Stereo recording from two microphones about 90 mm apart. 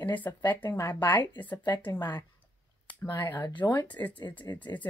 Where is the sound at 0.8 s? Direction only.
35° left (ahead or behind).